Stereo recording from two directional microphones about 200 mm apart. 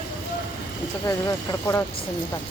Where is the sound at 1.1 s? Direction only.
15° left (ahead or behind).